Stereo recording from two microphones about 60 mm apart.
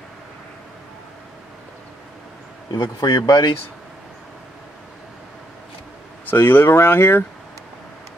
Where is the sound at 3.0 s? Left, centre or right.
Left.